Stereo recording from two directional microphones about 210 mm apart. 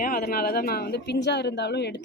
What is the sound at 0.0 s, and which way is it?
Speech, 45° left (ahead or behind).